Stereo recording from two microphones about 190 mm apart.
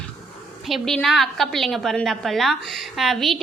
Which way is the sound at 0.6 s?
Centre (ahead or behind).